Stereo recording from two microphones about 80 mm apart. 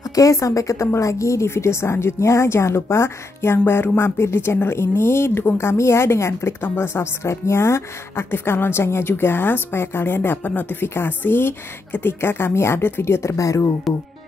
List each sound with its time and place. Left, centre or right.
0.1 s a woman's voice: left
13.9 s speech: centre